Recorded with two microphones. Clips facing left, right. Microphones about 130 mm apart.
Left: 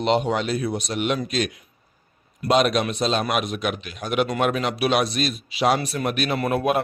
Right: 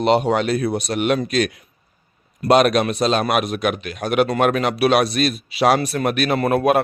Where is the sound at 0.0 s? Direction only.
55° right (ahead or behind).